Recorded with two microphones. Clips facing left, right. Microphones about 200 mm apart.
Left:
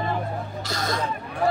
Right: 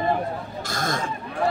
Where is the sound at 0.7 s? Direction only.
50° right (ahead or behind).